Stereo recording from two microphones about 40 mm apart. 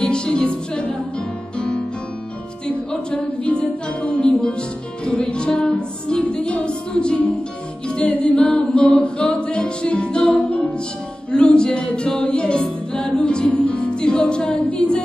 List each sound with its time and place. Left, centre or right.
0.0 s music: left
2.9 s music: left
5.0 s music: left
8.1 s a capella: left
8.4 s music: left
14.5 s a capella: left